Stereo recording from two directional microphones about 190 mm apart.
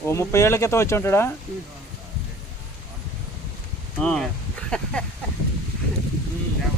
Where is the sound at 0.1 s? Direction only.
15° left (ahead or behind).